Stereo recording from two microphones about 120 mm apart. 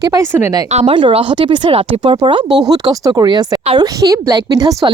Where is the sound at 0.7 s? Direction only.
65° right (ahead or behind).